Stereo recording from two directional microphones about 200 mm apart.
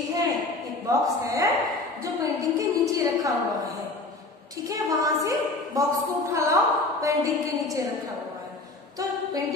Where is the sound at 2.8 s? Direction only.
15° right (ahead or behind).